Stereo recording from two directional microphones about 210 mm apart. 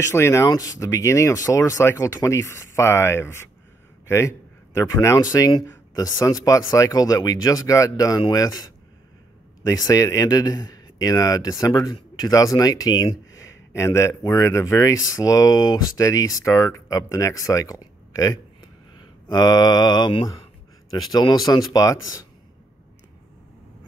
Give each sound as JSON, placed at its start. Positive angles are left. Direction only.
{"t": 0.0, "sound": "speech", "side_deg": 15}
{"t": 9.7, "sound": "speech", "side_deg": 15}